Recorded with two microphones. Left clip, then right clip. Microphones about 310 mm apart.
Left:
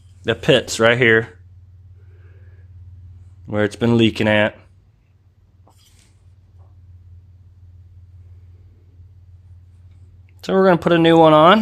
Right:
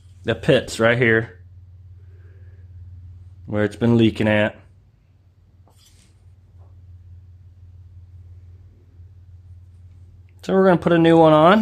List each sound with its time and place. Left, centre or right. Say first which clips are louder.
0.2 s speech: left 2 dB; centre
3.4 s speech: left 2 dB; centre
10.4 s speech: left 2 dB; centre